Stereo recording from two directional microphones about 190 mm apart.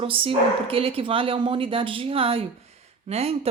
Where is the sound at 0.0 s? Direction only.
30° right (ahead or behind).